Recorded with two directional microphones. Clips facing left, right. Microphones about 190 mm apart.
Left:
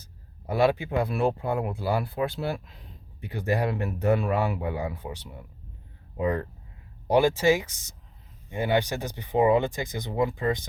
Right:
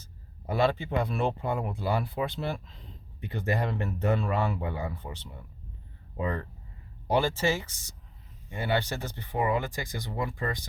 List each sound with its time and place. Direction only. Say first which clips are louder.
0.6 s speech: left 3 dB; 10° left (ahead or behind)